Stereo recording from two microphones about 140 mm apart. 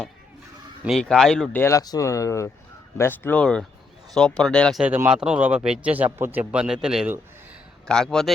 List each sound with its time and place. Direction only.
0.9 s speech: 5° left (ahead or behind)
1.5 s speech: 20° left (ahead or behind); by 4.8 s 5° left (ahead or behind)
4.8 s speech: 10° right (ahead or behind)